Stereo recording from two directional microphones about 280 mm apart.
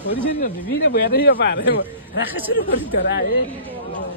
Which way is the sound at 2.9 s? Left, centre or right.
Left.